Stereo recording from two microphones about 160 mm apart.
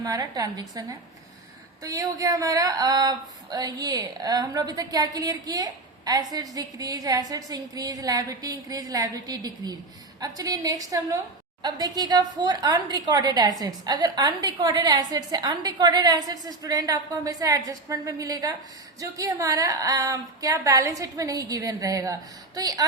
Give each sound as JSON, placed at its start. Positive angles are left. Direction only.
{"t": 0.0, "sound": "speech", "side_deg": -25}